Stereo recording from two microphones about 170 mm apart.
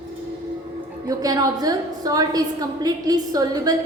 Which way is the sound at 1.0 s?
20° right (ahead or behind).